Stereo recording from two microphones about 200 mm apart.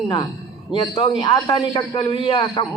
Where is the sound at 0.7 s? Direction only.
25° left (ahead or behind).